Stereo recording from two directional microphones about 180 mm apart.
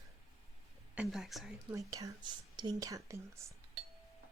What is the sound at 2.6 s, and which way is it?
Speech, 20° right (ahead or behind).